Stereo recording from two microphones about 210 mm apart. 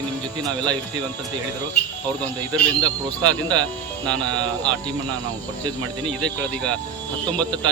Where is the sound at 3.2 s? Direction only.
20° right (ahead or behind).